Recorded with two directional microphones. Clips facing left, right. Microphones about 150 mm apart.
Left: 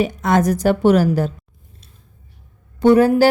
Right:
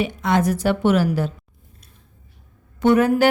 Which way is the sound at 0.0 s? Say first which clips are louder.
Left 3 dB; 45° left (ahead or behind).